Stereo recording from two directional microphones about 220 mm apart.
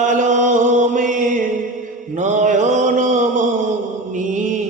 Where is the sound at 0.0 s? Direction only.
35° right (ahead or behind).